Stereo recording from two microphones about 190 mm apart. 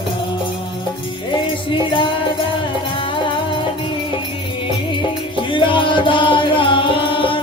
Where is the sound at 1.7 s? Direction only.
25° left (ahead or behind).